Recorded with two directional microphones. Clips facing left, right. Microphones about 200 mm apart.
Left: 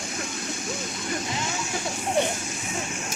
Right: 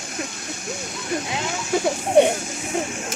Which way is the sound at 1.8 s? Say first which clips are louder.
Right 10 dB; 65° right (ahead or behind).